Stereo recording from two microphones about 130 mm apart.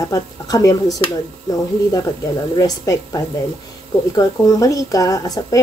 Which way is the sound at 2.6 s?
25° left (ahead or behind).